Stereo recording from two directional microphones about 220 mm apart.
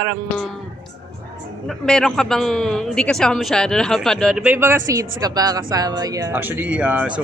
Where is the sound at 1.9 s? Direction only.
Centre (ahead or behind).